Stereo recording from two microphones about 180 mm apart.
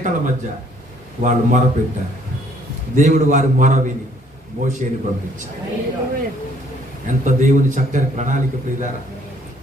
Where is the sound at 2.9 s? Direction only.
45° right (ahead or behind).